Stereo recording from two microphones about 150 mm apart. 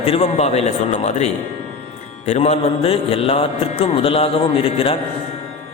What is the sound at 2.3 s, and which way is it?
Music, 50° left (ahead or behind).